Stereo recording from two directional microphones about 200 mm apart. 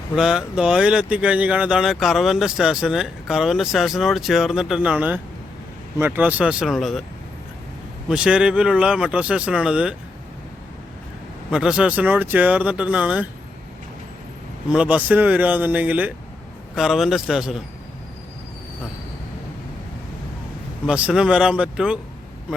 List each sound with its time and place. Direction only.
0.2 s speech: centre (ahead or behind)
8.0 s speech: 5° right (ahead or behind)
11.5 s speech: 5° right (ahead or behind)
14.7 s speech: 5° right (ahead or behind)
20.8 s speech: 5° right (ahead or behind)